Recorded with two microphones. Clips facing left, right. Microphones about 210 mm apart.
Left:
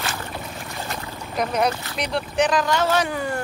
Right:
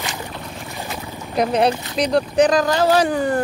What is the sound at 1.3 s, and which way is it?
Boat, 30° right (ahead or behind).